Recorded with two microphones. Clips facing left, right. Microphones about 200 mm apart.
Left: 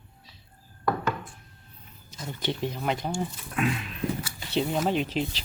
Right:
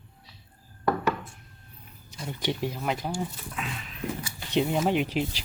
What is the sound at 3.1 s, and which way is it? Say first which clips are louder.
Speech: left 1 dB; 60° left (ahead or behind).